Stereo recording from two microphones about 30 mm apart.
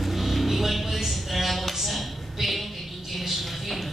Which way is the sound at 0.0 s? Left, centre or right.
Centre.